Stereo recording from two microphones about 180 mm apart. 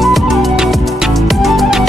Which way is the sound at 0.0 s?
Centre (ahead or behind).